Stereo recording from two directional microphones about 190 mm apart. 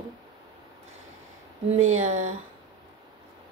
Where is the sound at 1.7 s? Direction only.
35° right (ahead or behind).